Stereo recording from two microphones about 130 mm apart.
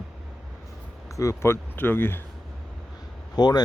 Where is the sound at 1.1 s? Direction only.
25° left (ahead or behind).